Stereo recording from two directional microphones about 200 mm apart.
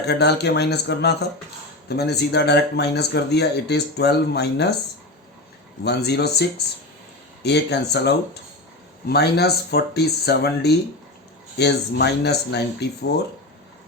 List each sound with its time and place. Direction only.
0.0 s speech: 55° left (ahead or behind)
5.8 s speech: 55° left (ahead or behind)